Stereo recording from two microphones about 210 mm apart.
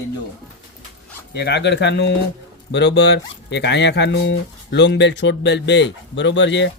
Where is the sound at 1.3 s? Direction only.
50° left (ahead or behind).